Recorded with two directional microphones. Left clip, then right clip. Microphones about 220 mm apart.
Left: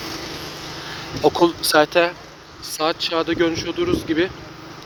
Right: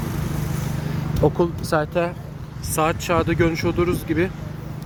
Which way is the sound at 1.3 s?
20° left (ahead or behind).